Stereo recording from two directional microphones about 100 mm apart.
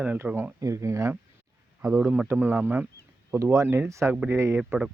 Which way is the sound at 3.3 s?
30° right (ahead or behind).